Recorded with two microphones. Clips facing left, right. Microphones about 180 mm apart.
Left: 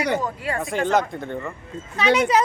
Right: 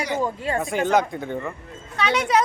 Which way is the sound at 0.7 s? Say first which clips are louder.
Even; centre (ahead or behind).